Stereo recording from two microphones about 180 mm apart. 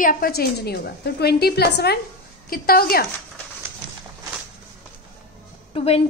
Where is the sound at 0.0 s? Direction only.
50° left (ahead or behind).